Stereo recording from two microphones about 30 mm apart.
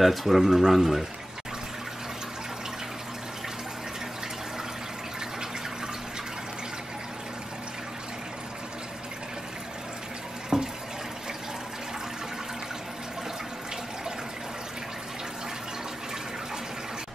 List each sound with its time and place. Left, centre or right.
0.0 s speech: centre
10.5 s water: right